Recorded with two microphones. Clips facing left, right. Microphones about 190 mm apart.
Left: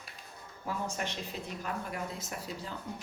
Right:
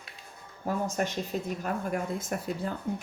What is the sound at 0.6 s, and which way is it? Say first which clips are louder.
Speech: right 6 dB; 45° right (ahead or behind).